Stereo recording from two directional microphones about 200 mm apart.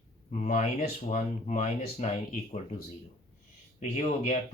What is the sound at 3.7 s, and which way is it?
Speech, 35° left (ahead or behind).